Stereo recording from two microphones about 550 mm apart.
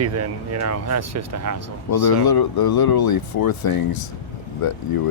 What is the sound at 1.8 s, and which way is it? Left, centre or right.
Speech, left.